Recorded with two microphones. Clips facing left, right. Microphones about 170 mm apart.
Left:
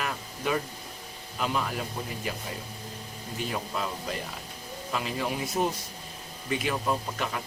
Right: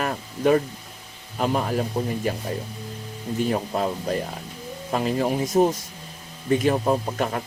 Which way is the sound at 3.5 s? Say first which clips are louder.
Right 7 dB; 45° right (ahead or behind).